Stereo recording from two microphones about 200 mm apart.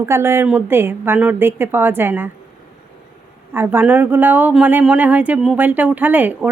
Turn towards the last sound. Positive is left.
turn(degrees=-10)  # may be behind; listen again after turning